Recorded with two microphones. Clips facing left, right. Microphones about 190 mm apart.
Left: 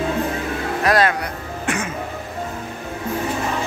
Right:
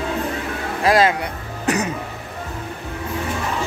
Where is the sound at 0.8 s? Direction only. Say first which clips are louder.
Right 2 dB; 25° right (ahead or behind).